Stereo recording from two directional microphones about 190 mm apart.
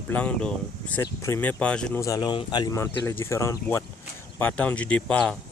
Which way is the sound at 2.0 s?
20° left (ahead or behind).